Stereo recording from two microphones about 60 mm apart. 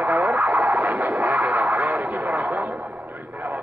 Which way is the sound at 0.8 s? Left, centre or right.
Right.